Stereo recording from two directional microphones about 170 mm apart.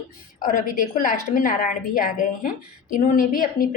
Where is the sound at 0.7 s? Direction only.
50° left (ahead or behind).